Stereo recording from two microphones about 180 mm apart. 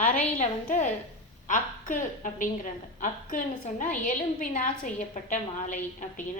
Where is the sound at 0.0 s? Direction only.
45° left (ahead or behind).